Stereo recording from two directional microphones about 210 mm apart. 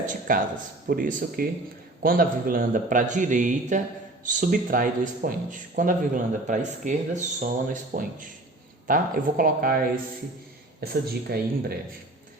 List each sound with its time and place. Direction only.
0.0 s speech: 40° right (ahead or behind)